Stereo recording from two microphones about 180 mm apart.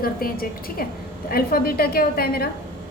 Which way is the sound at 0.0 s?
55° left (ahead or behind).